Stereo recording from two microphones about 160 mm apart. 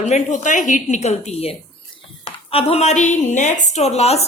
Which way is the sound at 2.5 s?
40° left (ahead or behind).